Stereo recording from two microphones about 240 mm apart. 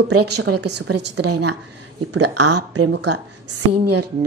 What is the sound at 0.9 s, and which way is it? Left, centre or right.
Speech, right.